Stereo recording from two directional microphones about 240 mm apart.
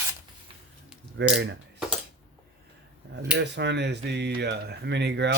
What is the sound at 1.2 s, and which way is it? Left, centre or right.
Speech, right.